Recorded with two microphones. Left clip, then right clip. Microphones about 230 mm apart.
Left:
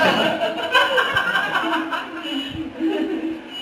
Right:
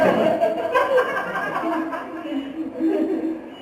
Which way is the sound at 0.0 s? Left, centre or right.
Centre.